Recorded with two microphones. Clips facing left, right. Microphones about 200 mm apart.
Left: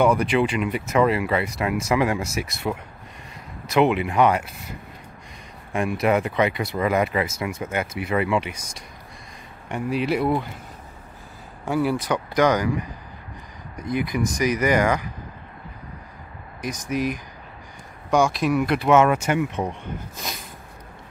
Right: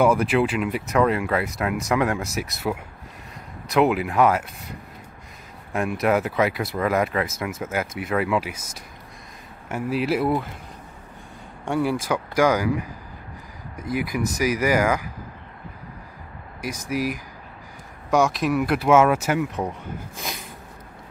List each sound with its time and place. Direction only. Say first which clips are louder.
0.0 s speech: even; 5° right (ahead or behind)
11.6 s speech: left 1 dB; centre (ahead or behind)
13.7 s speech: left 1 dB; 5° right (ahead or behind)
16.6 s speech: left 1 dB; 5° right (ahead or behind)